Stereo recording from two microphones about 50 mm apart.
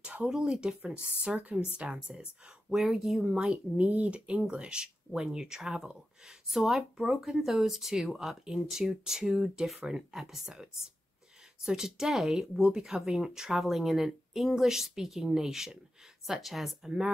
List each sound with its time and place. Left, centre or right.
0.0 s speech: right
1.2 s speech: right
2.1 s a woman's voice: centre
3.3 s a woman's voice: right; by 16.9 s centre